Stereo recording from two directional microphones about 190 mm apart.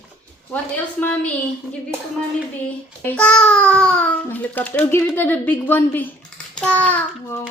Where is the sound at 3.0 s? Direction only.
10° left (ahead or behind).